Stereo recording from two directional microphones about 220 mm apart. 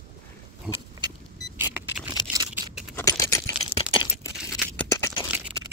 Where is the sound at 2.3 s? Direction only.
20° right (ahead or behind).